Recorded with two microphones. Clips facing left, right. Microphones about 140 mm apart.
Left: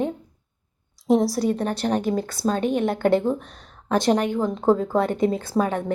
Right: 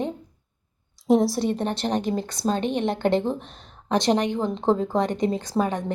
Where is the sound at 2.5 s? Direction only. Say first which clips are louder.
Left 2 dB; 10° left (ahead or behind).